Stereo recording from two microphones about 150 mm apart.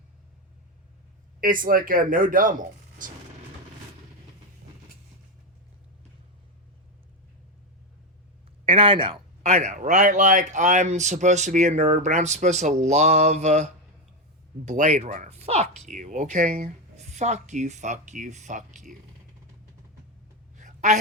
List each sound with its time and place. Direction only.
1.4 s speech: 65° right (ahead or behind)
8.6 s a man's voice: 35° right (ahead or behind); by 18.9 s 55° right (ahead or behind)
20.6 s a sound: 55° right (ahead or behind)